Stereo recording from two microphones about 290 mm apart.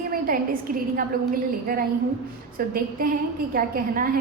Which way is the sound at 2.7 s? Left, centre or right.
Right.